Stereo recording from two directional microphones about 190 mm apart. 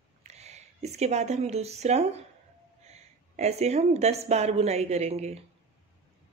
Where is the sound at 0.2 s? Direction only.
35° right (ahead or behind).